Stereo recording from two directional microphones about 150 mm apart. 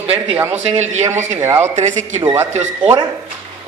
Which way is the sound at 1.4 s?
20° right (ahead or behind).